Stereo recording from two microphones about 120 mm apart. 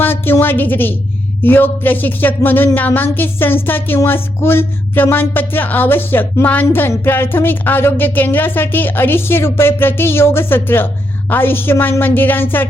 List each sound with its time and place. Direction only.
0.0 s a woman's voice: 15° left (ahead or behind)